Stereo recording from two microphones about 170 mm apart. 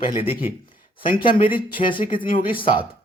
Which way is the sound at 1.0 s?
55° left (ahead or behind).